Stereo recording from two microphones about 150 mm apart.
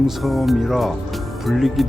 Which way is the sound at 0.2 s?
Centre (ahead or behind).